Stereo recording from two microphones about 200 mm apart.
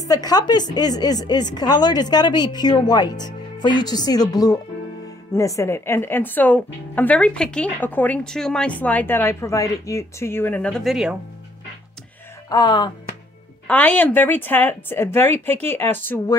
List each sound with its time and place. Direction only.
0.1 s a woman's voice: 20° left (ahead or behind); by 11.1 s centre (ahead or behind)
12.4 s a woman's voice: 20° left (ahead or behind)
13.7 s a woman's voice: 10° left (ahead or behind)